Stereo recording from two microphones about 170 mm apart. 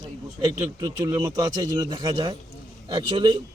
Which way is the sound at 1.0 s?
25° right (ahead or behind).